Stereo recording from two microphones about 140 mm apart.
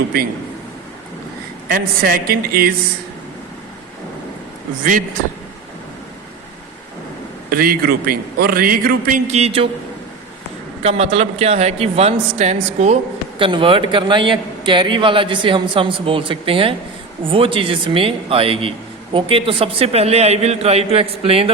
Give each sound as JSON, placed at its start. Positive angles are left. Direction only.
{"t": 1.6, "sound": "a man's voice", "side_deg": -90}
{"t": 4.8, "sound": "a man's voice", "side_deg": -70}
{"t": 7.5, "sound": "a man's voice", "side_deg": -90}
{"t": 9.2, "sound": "a man's voice", "side_deg": -50}
{"t": 10.8, "sound": "a man's voice", "side_deg": -50}
{"t": 13.4, "sound": "a man's voice", "side_deg": -40}